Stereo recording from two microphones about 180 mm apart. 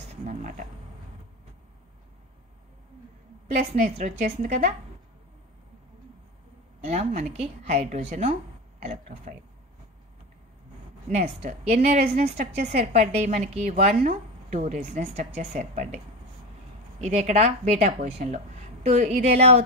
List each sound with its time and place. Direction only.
0.1 s speech: 40° right (ahead or behind)
3.8 s a woman's voice: 40° right (ahead or behind)
6.9 s a woman's voice: 35° right (ahead or behind)
11.1 s a woman's voice: 40° right (ahead or behind)
17.0 s a woman's voice: 40° right (ahead or behind)